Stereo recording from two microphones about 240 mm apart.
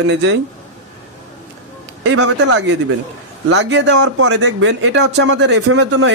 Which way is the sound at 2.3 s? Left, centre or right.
Right.